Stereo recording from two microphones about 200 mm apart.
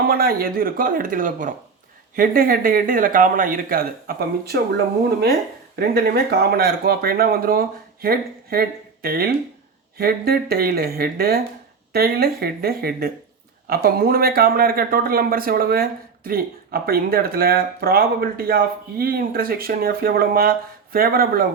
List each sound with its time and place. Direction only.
0.0 s speech: 50° right (ahead or behind)
5.8 s speech: 50° right (ahead or behind)